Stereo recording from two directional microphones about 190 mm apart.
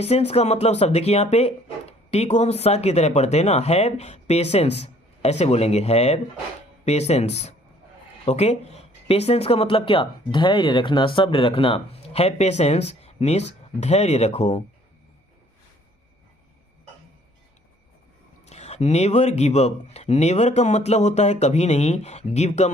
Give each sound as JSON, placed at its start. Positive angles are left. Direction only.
{"t": 0.0, "sound": "speech", "side_deg": 35}
{"t": 18.4, "sound": "speech", "side_deg": 35}